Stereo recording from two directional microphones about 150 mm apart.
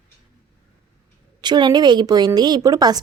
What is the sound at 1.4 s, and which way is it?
A woman's voice, 30° right (ahead or behind).